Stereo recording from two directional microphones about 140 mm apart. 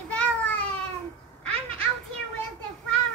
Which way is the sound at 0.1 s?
10° left (ahead or behind).